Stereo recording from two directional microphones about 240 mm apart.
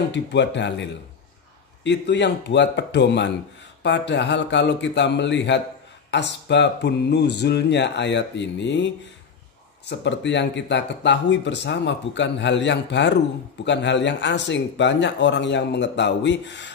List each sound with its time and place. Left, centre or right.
0.1 s speech: left
1.9 s speech: left